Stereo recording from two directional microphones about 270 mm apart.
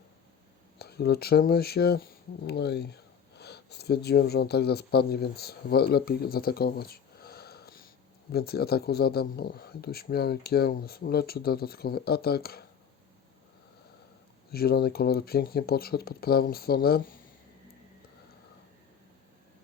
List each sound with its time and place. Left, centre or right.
0.8 s speech: left
14.5 s speech: left